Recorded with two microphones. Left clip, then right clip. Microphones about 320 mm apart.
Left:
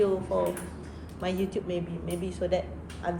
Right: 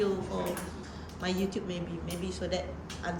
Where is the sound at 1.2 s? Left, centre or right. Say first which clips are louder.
Left 3 dB; centre.